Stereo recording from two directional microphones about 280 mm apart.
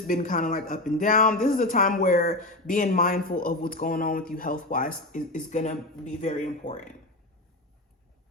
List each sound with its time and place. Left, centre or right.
0.1 s speech: left